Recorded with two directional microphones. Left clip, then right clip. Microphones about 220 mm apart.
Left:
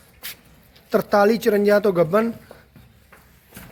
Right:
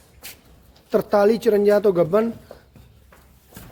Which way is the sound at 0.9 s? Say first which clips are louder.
Even; 5° right (ahead or behind).